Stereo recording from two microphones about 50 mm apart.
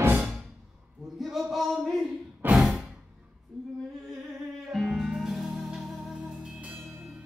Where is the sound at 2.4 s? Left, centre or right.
Right.